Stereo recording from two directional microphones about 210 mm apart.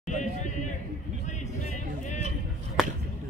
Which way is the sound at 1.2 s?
35° left (ahead or behind).